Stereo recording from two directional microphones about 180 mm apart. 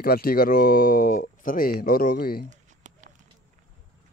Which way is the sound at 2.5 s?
45° right (ahead or behind).